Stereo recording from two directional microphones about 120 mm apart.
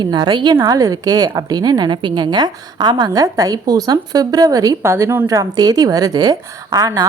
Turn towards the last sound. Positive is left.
turn(degrees=-30)  # may be behind; listen again after turning